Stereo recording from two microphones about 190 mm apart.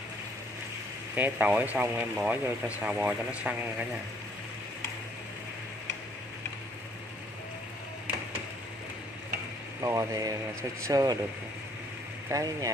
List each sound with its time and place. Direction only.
1.1 s speech: 10° right (ahead or behind)
9.8 s speech: 20° right (ahead or behind)
12.3 s speech: 15° right (ahead or behind)